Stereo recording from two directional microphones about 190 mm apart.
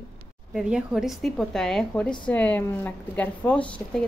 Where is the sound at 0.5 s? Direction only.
Centre (ahead or behind).